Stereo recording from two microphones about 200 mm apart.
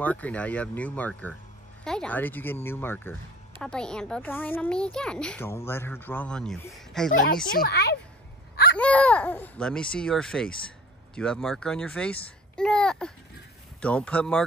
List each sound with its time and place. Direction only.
0.0 s a child's voice: 5° left (ahead or behind)
7.5 s a woman's voice: 50° left (ahead or behind)
8.7 s a child's voice: 5° left (ahead or behind)